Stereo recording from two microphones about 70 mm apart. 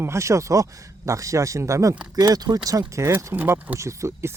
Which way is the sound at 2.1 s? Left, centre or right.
Right.